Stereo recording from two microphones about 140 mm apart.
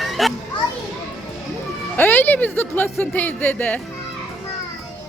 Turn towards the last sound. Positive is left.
turn(degrees=10)  # may be behind; listen again after turning